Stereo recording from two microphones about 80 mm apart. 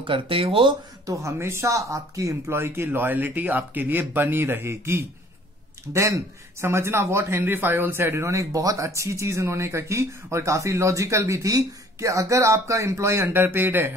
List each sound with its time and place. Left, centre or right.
0.0 s speech: right
1.0 s a man's voice: right